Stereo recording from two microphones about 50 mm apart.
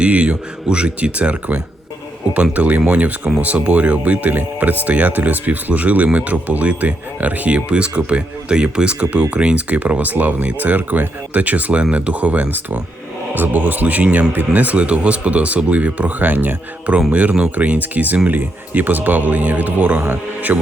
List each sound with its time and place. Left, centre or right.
0.0 s speech: right